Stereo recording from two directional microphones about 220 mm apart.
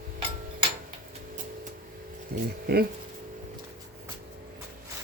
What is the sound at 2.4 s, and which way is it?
Speech, 45° right (ahead or behind).